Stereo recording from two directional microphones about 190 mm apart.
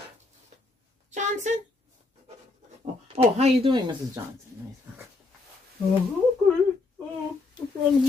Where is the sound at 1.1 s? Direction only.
40° right (ahead or behind).